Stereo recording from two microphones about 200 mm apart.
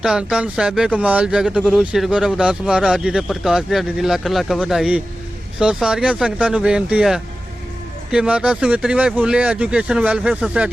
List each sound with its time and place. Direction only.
0.0 s speech: 5° right (ahead or behind)